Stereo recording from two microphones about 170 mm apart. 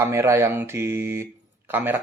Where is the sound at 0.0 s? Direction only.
15° right (ahead or behind).